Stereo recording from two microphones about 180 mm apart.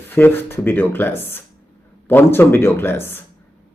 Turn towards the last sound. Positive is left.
turn(degrees=10)  # may be behind; listen again after turning